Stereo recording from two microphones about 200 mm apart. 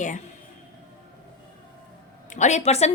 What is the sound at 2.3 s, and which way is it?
Speech, 35° left (ahead or behind).